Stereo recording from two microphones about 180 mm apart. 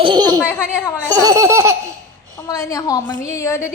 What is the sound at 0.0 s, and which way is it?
Belly laugh, 25° right (ahead or behind).